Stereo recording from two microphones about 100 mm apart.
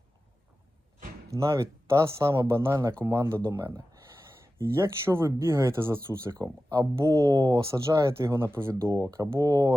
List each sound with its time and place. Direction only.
1.3 s speech: 30° right (ahead or behind)
7.7 s speech: 30° right (ahead or behind)